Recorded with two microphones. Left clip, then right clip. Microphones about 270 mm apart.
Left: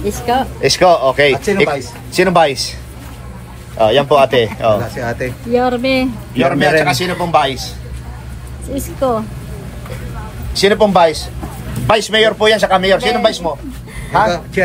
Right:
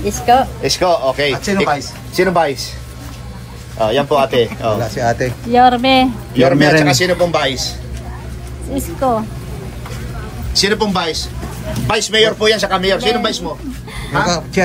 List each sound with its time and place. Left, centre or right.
0.0 s speech: centre
0.6 s a man's voice: left
1.3 s speech: centre
2.2 s a man's voice: left
3.7 s a man's voice: left
4.9 s speech: centre
6.3 s a man's voice: centre
8.7 s speech: centre
10.5 s a man's voice: centre
14.2 s a man's voice: centre